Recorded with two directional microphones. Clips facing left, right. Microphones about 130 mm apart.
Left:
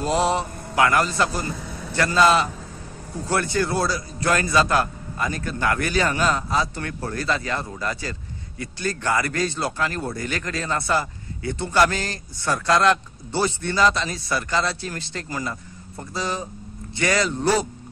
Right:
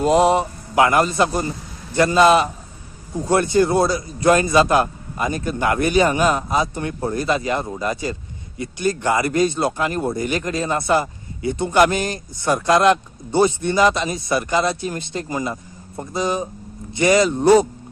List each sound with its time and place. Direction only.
0.0 s a man's voice: 20° right (ahead or behind)